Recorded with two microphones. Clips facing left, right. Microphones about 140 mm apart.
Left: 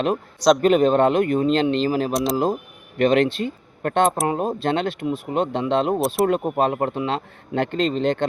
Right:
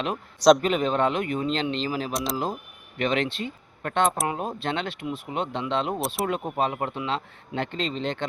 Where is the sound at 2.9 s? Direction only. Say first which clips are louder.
Left 8 dB; 45° left (ahead or behind).